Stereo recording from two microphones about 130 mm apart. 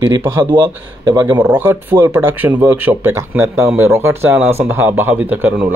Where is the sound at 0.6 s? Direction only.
30° right (ahead or behind).